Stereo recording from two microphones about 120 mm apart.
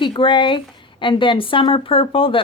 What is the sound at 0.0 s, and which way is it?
A woman's voice, 45° left (ahead or behind).